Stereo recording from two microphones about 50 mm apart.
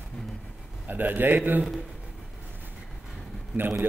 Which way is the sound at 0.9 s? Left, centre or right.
Right.